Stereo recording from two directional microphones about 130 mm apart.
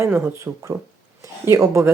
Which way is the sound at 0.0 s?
20° right (ahead or behind).